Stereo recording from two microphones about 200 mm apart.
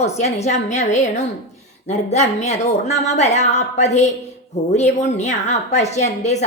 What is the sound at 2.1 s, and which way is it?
A woman's voice, 35° left (ahead or behind).